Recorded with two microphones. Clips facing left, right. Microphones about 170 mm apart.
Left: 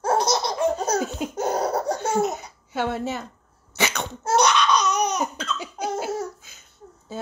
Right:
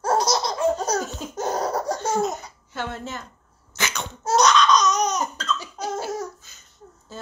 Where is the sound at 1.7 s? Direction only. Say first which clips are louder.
Left 1 dB; 60° left (ahead or behind).